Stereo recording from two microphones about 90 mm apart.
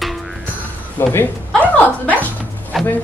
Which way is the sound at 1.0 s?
25° left (ahead or behind).